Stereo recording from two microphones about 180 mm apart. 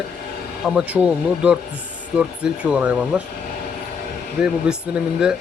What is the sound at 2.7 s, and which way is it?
Speech, 10° right (ahead or behind).